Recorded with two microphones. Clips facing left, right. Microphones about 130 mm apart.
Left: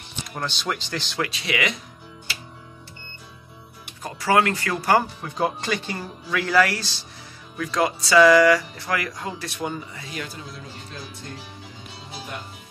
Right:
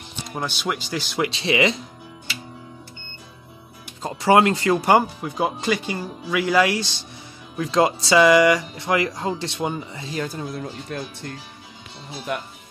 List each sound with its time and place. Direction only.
0.4 s speech: 10° right (ahead or behind)
1.2 s speech: 25° right (ahead or behind)
4.0 s speech: 25° right (ahead or behind)
5.2 s speech: 10° right (ahead or behind); by 10.2 s 25° right (ahead or behind)
10.2 s speech: 45° right (ahead or behind)
12.3 s speech: 70° right (ahead or behind)